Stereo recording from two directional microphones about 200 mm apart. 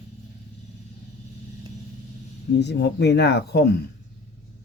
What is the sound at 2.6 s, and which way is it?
Speech, 60° left (ahead or behind).